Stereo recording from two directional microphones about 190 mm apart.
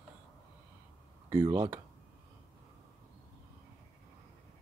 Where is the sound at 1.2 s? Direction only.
20° right (ahead or behind).